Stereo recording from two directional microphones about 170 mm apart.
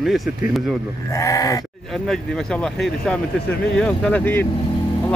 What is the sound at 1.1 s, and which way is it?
Sheep, 20° left (ahead or behind).